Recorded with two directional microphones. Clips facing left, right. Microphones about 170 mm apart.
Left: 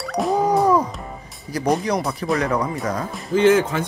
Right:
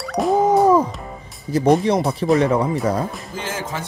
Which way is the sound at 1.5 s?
25° right (ahead or behind).